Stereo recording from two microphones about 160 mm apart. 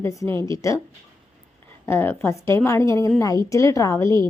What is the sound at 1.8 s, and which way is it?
A woman's voice, 15° left (ahead or behind).